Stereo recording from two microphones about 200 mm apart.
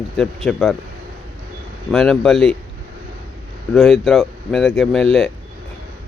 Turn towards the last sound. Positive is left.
turn(degrees=0)  # may be behind; listen again after turning